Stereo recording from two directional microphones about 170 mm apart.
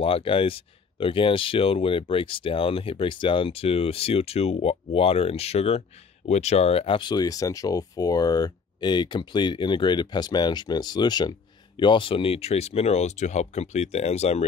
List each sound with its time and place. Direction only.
0.0 s speech: 35° left (ahead or behind)